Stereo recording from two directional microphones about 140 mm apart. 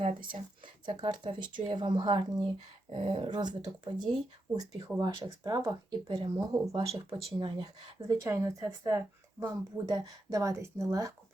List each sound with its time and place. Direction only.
0.3 s speech: 35° right (ahead or behind)
7.1 s speech: 35° right (ahead or behind)